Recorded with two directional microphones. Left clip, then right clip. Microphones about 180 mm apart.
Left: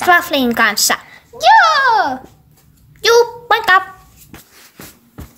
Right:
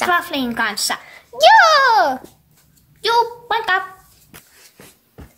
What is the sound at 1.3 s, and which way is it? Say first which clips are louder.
Speech: even; 45° right (ahead or behind).